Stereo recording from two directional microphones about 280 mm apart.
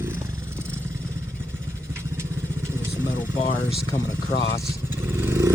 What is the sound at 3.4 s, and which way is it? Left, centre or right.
Speech, left.